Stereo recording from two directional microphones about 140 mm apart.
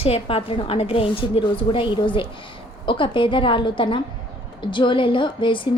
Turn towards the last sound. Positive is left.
turn(degrees=35)  # may be behind; listen again after turning